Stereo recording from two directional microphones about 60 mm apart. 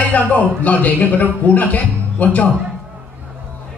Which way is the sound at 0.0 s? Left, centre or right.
Left.